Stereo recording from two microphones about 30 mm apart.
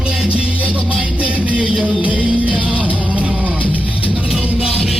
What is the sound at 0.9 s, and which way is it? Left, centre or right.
Music, right.